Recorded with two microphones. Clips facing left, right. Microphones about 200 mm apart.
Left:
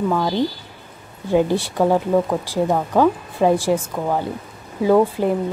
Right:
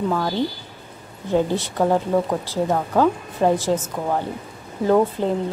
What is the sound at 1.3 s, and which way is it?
Speech, 10° left (ahead or behind).